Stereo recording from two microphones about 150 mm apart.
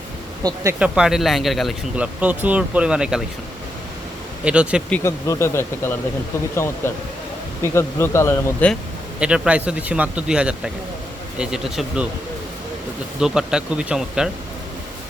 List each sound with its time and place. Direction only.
0.4 s speech: 20° right (ahead or behind)
0.8 s speech: 5° right (ahead or behind)
4.4 s speech: 5° right (ahead or behind)
4.9 s speech: 20° left (ahead or behind)
9.2 s speech: 5° right (ahead or behind)
13.1 s speech: 5° right (ahead or behind)